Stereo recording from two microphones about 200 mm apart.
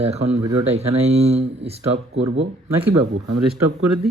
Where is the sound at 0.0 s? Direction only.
30° right (ahead or behind).